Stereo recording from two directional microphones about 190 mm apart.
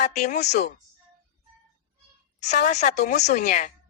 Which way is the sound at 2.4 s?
40° left (ahead or behind).